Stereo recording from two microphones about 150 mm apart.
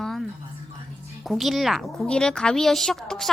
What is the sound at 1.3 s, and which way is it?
A woman's voice, centre (ahead or behind).